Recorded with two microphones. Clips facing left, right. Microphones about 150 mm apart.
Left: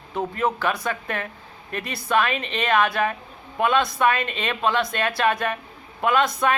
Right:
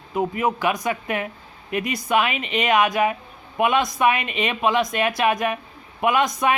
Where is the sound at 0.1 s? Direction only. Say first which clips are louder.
Right 2 dB; 10° right (ahead or behind).